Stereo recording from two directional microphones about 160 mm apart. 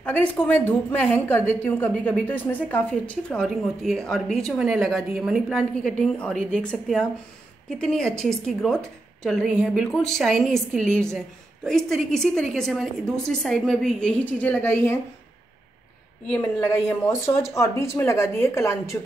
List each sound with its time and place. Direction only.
0.0 s a woman's voice: 10° left (ahead or behind)
16.3 s speech: 15° left (ahead or behind)